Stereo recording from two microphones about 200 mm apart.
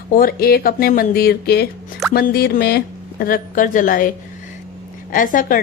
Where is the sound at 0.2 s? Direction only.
50° left (ahead or behind).